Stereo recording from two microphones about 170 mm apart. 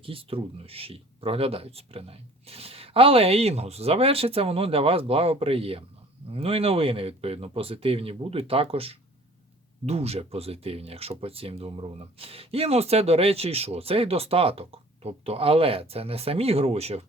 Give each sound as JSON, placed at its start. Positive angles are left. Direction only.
{"t": 0.0, "sound": "speech", "side_deg": -35}